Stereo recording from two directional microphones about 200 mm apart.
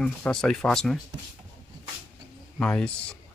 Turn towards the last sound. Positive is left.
turn(degrees=5)  # may be behind; listen again after turning